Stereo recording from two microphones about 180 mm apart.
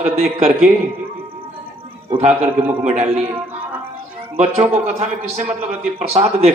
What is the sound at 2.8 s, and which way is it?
Speech, 35° right (ahead or behind).